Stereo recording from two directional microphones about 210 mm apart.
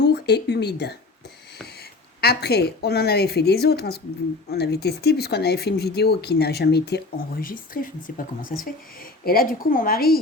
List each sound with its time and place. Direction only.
0.0 s a woman's voice: 50° left (ahead or behind)